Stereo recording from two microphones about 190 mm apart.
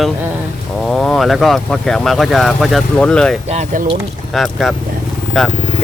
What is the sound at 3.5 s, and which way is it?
Speech, 35° right (ahead or behind).